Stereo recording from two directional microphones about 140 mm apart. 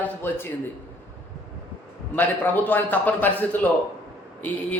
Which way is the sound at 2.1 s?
15° left (ahead or behind).